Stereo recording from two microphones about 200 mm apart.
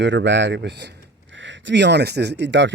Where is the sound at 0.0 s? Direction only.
65° right (ahead or behind).